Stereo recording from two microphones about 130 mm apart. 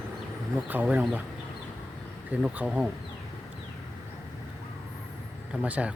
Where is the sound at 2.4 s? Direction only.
10° right (ahead or behind).